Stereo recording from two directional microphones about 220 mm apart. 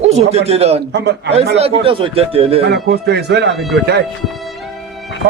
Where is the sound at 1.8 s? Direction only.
25° right (ahead or behind).